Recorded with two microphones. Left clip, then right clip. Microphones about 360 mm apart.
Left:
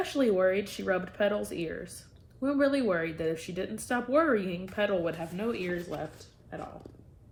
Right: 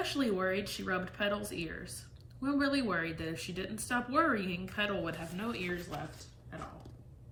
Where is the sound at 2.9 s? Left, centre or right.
Left.